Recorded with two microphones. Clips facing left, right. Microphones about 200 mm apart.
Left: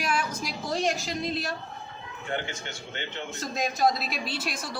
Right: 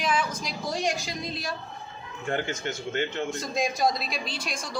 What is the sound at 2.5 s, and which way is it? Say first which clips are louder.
Speech: right 7 dB; 45° right (ahead or behind).